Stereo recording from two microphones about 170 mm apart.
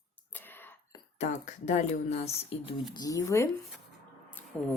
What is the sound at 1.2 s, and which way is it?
Speech, 45° left (ahead or behind).